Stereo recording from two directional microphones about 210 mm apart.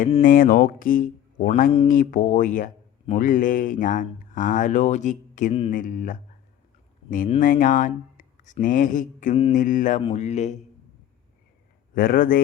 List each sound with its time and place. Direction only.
0.2 s speech: 40° left (ahead or behind)
7.3 s speech: 40° left (ahead or behind)
11.9 s speech: 45° left (ahead or behind)